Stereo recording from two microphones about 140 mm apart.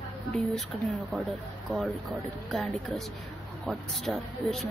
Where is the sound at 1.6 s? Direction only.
Centre (ahead or behind).